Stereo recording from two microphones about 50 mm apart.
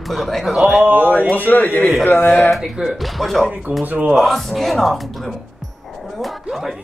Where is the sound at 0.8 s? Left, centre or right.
Right.